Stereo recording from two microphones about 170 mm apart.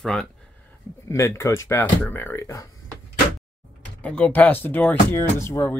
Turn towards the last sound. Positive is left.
turn(degrees=15)  # may be behind; listen again after turning